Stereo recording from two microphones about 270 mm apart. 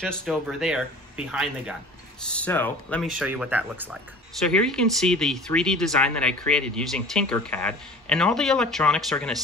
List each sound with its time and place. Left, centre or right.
0.0 s speech: centre